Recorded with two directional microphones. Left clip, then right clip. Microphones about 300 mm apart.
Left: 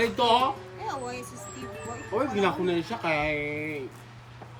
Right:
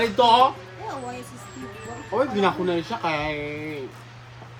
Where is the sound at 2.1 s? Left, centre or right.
Centre.